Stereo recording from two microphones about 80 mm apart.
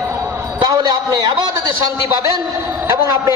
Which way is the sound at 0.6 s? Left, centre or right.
Right.